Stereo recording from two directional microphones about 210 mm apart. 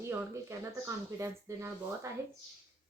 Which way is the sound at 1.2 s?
15° right (ahead or behind).